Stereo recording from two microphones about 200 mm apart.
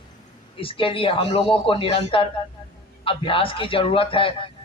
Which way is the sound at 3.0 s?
25° left (ahead or behind).